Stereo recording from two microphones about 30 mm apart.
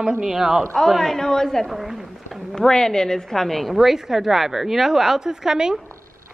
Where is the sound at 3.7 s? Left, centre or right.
Centre.